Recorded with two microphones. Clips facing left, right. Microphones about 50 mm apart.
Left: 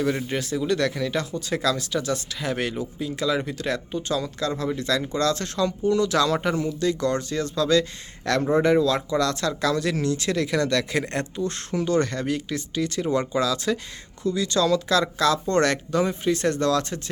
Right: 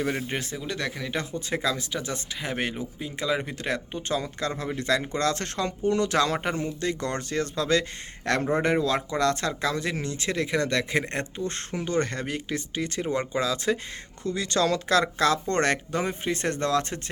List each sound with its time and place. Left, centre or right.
0.5 s speech: centre
1.4 s speech: right
14.3 s speech: right